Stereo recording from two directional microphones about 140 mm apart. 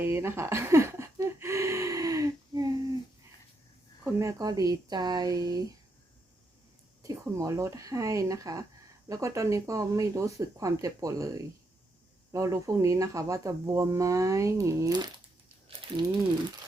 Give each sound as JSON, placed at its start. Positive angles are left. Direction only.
{"t": 0.0, "sound": "a sound", "side_deg": -15}
{"t": 4.0, "sound": "speech", "side_deg": -20}
{"t": 7.0, "sound": "speech", "side_deg": -25}